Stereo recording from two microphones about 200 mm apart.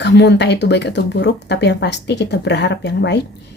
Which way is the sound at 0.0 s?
60° left (ahead or behind).